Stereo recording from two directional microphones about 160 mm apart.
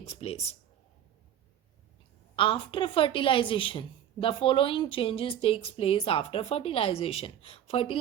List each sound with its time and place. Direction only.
0.0 s a woman's voice: 40° left (ahead or behind)
2.3 s a woman's voice: 30° left (ahead or behind)